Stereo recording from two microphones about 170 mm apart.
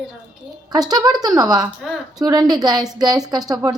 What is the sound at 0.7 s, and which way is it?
A woman's voice, 25° right (ahead or behind).